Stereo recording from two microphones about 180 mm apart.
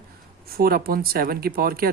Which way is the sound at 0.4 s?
55° right (ahead or behind).